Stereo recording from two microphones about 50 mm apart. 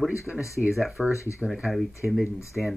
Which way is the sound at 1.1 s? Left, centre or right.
Left.